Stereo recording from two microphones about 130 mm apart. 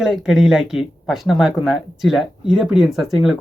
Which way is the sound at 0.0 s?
5° right (ahead or behind).